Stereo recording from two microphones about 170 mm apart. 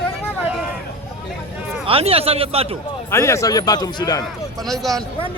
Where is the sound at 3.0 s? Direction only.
15° left (ahead or behind).